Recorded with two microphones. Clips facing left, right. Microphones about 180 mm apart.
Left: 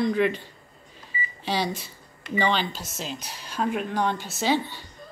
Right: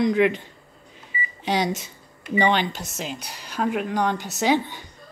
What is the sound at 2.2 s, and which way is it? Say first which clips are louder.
Speech: right 4 dB; 10° right (ahead or behind).